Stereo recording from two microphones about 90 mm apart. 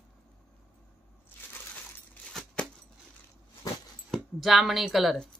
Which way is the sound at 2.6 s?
15° left (ahead or behind).